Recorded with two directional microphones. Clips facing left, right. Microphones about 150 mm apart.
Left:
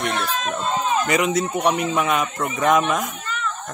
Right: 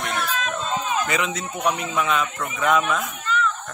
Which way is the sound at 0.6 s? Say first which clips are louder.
Left 4 dB; 40° left (ahead or behind).